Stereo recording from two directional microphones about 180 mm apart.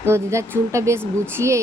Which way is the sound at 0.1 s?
15° right (ahead or behind).